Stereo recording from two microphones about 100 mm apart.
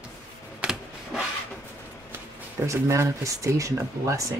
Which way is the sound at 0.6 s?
5° right (ahead or behind).